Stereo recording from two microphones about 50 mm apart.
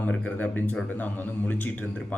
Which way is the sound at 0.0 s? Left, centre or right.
Left.